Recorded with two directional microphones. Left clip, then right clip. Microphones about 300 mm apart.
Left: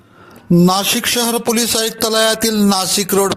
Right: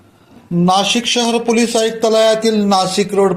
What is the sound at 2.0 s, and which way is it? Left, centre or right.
Music, left.